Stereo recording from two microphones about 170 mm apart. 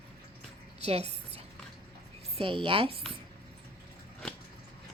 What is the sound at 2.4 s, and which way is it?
Speech, 30° right (ahead or behind).